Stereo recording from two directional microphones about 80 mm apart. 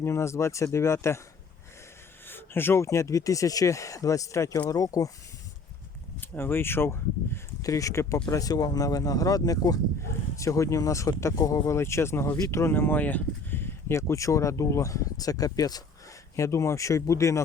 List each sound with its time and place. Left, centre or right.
0.0 s speech: left
2.2 s speech: left
6.1 s speech: left
7.6 s speech: left
10.0 s speech: left
16.3 s speech: left